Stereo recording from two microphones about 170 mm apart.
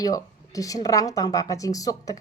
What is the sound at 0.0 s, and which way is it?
Speech, 20° left (ahead or behind).